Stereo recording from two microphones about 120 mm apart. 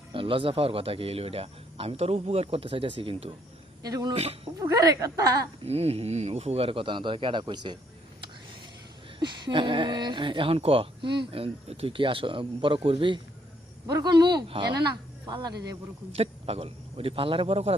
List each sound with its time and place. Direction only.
0.1 s speech: 45° right (ahead or behind)
3.8 s speech: 30° right (ahead or behind)
4.1 s speech: 60° right (ahead or behind)
4.6 s speech: 30° right (ahead or behind)
5.6 s speech: 60° right (ahead or behind); by 7.8 s 40° right (ahead or behind)
9.1 s speech: 40° right (ahead or behind)
13.8 s speech: 35° right (ahead or behind)
16.1 s speech: 55° right (ahead or behind)